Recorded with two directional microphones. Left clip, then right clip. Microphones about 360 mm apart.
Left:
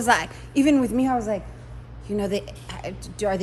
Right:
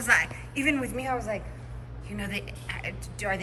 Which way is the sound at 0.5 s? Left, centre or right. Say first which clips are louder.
Left 8 dB; centre.